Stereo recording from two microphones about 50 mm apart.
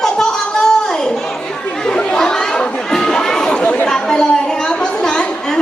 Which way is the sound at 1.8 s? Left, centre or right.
Centre.